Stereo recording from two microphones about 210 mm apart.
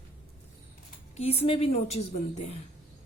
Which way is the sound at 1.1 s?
30° left (ahead or behind).